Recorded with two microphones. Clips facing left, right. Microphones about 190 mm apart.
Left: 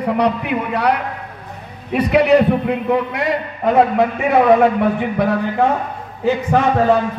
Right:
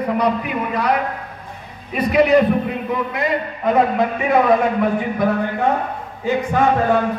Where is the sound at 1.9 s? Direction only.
70° left (ahead or behind).